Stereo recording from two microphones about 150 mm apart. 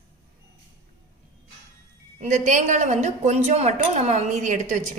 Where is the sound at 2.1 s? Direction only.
55° right (ahead or behind).